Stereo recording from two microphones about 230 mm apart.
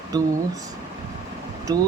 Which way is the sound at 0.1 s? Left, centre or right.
Centre.